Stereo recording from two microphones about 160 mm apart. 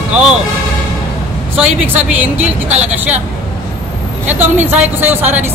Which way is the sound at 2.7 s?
45° right (ahead or behind).